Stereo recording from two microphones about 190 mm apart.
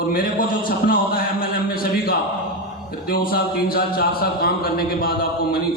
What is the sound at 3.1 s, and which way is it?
Speech, 50° left (ahead or behind).